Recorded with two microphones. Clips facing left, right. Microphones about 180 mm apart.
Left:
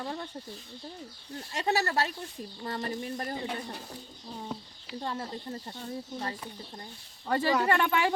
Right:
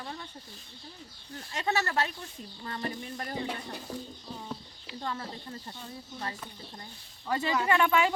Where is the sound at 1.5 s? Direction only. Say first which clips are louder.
Left 2 dB; 35° left (ahead or behind).